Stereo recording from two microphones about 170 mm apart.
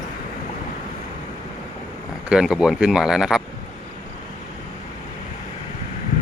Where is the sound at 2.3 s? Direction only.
5° right (ahead or behind).